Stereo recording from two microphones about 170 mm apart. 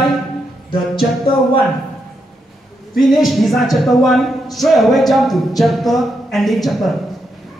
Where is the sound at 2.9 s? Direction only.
Centre (ahead or behind).